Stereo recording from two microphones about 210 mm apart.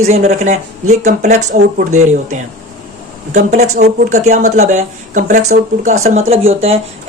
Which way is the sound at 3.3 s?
35° right (ahead or behind).